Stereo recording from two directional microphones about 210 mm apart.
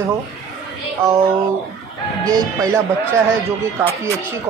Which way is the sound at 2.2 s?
15° right (ahead or behind).